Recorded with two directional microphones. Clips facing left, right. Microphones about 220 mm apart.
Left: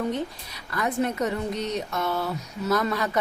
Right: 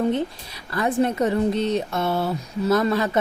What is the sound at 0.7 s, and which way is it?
A woman's voice, 30° right (ahead or behind).